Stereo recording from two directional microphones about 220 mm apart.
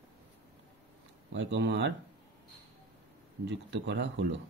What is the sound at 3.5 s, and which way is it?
Speech, 55° right (ahead or behind).